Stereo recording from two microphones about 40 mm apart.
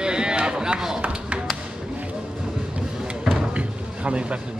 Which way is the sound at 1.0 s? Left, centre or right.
Right.